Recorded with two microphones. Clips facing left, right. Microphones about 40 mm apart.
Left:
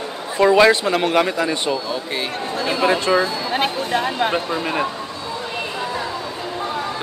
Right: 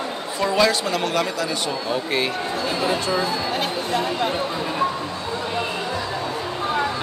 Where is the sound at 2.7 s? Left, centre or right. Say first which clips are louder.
Left 6 dB; left.